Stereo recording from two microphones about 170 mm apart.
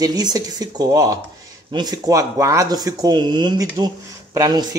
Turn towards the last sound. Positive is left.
turn(degrees=-25)  # may be behind; listen again after turning